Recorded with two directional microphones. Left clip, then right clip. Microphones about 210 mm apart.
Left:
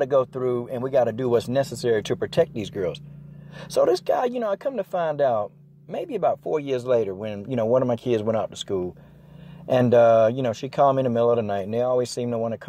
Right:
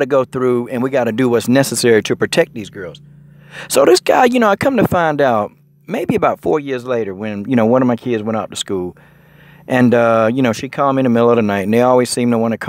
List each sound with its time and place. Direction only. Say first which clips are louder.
0.0 s speech: right 7 dB; 35° right (ahead or behind)
2.5 s speech: left 1 dB; 10° right (ahead or behind)
3.5 s speech: right 10 dB; 35° right (ahead or behind)